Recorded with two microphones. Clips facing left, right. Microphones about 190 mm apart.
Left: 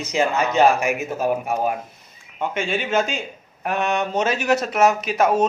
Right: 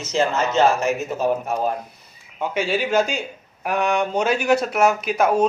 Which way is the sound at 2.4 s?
5° right (ahead or behind).